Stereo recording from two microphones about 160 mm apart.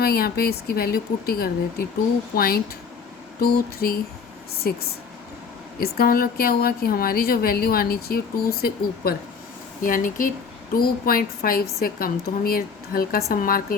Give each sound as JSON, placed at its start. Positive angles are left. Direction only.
{"t": 0.0, "sound": "a woman's voice", "side_deg": 75}
{"t": 5.8, "sound": "a woman's voice", "side_deg": 70}
{"t": 9.8, "sound": "a woman's voice", "side_deg": 55}